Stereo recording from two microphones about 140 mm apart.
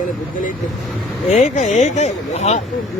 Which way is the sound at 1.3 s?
60° left (ahead or behind).